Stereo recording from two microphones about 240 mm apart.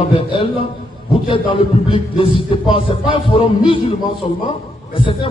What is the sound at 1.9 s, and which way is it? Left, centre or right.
A man's voice, left.